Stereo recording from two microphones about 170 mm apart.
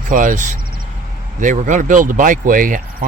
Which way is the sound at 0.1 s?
50° right (ahead or behind).